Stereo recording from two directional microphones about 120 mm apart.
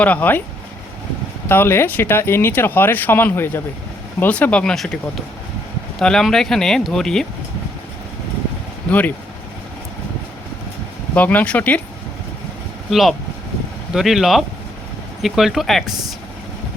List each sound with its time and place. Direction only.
0.0 s speech: 15° left (ahead or behind)
1.5 s speech: 20° left (ahead or behind)
8.9 s speech: 15° left (ahead or behind)
11.1 s speech: 15° left (ahead or behind)
12.9 s speech: centre (ahead or behind)